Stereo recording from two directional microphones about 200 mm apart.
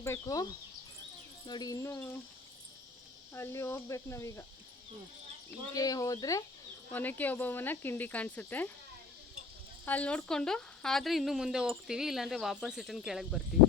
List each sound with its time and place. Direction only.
0.0 s speech: 15° left (ahead or behind)
1.5 s speech: 20° left (ahead or behind)
3.3 s speech: 15° left (ahead or behind)
5.7 s speech: 20° left (ahead or behind)
9.8 s speech: 5° left (ahead or behind)